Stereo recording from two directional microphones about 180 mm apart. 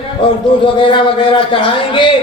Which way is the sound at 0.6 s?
30° left (ahead or behind).